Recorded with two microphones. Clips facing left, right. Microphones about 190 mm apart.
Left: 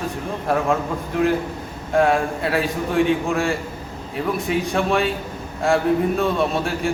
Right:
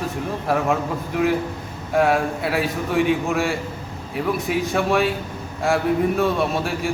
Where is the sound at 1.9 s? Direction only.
5° right (ahead or behind).